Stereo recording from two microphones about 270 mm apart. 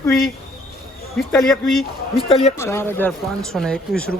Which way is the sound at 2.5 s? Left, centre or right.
Centre.